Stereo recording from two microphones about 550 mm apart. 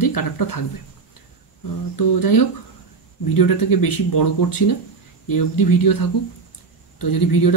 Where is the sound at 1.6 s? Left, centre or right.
Left.